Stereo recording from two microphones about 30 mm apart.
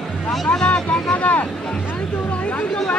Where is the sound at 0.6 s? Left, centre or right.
Left.